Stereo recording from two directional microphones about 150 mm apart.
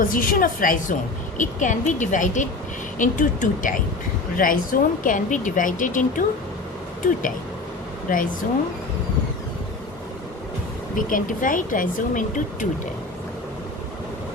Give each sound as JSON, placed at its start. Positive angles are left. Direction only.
{"t": 0.0, "sound": "a woman's voice", "side_deg": 70}
{"t": 10.9, "sound": "speech", "side_deg": 65}